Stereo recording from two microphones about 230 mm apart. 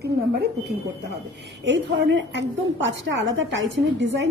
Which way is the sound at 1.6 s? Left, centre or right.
Right.